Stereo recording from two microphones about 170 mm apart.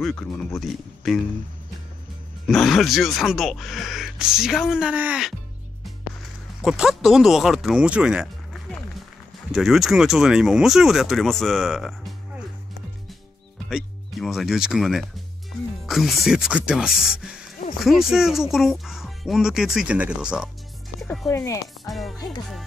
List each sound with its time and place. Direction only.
0.0 s speech: 5° left (ahead or behind)
2.4 s speech: centre (ahead or behind)
6.6 s speech: centre (ahead or behind)
9.5 s speech: centre (ahead or behind)
13.7 s speech: centre (ahead or behind)
21.3 s speech: 15° left (ahead or behind)
21.8 s speech: centre (ahead or behind)